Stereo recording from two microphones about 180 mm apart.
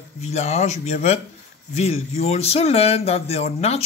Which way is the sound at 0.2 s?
40° left (ahead or behind).